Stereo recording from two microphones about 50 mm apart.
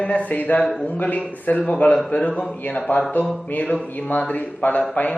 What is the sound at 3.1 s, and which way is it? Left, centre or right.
A man's voice, left.